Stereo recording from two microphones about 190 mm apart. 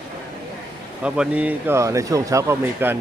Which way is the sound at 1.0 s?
5° right (ahead or behind).